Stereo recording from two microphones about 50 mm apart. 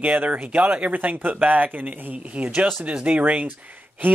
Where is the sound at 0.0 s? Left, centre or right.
Right.